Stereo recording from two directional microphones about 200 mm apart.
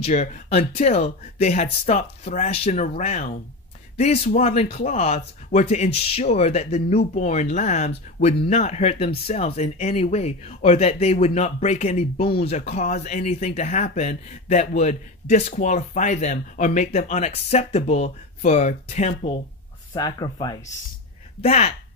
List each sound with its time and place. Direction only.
0.0 s speech: 35° left (ahead or behind)
19.9 s speech: 20° left (ahead or behind)
21.4 s speech: 30° left (ahead or behind)